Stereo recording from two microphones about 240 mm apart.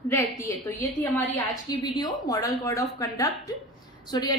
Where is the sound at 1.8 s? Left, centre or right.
Centre.